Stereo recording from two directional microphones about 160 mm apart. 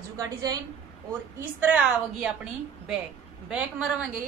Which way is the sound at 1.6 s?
5° right (ahead or behind).